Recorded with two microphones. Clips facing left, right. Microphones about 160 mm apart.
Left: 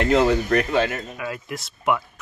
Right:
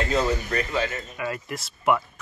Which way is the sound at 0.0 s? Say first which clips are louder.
Left 6 dB; 70° left (ahead or behind).